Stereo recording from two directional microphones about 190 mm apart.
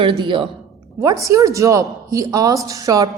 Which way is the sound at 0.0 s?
25° right (ahead or behind).